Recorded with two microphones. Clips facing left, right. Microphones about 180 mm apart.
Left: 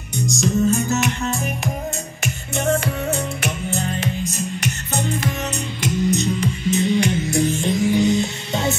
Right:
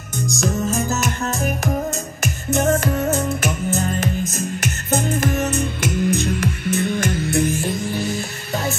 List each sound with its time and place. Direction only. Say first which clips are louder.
0.3 s music: left 3 dB; 65° right (ahead or behind)
0.8 s music: left 1 dB; 40° right (ahead or behind)
7.4 s music: left 3 dB; 5° right (ahead or behind)
7.9 s music: left 7 dB; 20° left (ahead or behind)